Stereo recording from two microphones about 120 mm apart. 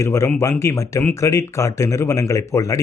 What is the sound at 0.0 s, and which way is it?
Speech, 20° left (ahead or behind).